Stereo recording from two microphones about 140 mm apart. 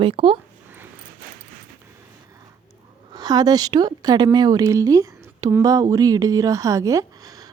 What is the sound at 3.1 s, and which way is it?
Speech, 30° right (ahead or behind).